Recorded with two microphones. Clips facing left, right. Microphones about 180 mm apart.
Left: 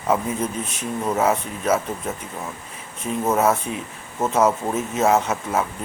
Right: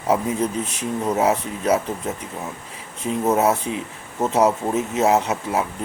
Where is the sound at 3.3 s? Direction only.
20° right (ahead or behind).